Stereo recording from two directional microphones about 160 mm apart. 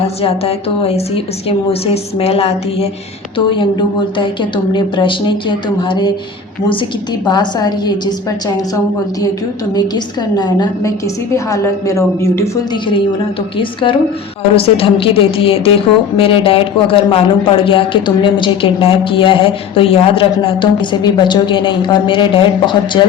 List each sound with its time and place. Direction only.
0.2 s a woman's voice: 40° left (ahead or behind)
4.2 s a woman's voice: 30° left (ahead or behind)
7.3 s a woman's voice: 25° left (ahead or behind)
9.7 s a woman's voice: 25° left (ahead or behind)
14.5 s a woman's voice: 35° left (ahead or behind)